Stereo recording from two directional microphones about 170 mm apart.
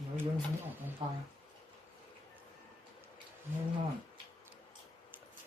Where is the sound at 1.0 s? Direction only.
25° right (ahead or behind).